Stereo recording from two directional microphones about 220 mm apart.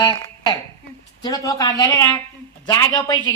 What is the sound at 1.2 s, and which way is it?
A woman's voice, 15° left (ahead or behind).